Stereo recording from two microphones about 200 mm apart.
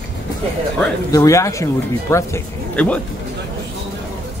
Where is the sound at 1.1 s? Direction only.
15° left (ahead or behind).